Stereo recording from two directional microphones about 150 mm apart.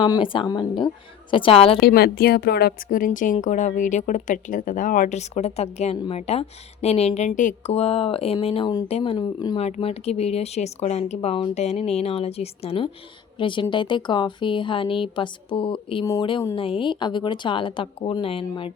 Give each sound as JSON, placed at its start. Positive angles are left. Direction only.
{"t": 0.0, "sound": "speech", "side_deg": 35}
{"t": 1.9, "sound": "speech", "side_deg": 80}
{"t": 8.9, "sound": "speech", "side_deg": 45}
{"t": 9.1, "sound": "speech", "side_deg": 30}
{"t": 9.6, "sound": "speech", "side_deg": 45}